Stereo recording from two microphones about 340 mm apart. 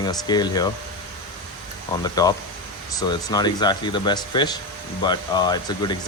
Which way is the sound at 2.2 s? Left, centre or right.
Centre.